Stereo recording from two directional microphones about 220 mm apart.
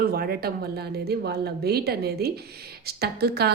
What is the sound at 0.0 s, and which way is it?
Speech, 40° right (ahead or behind).